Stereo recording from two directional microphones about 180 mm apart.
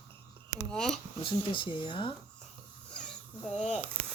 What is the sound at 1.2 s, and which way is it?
Speech, 30° left (ahead or behind).